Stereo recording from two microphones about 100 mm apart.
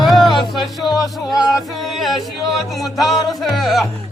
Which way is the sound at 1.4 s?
Centre (ahead or behind).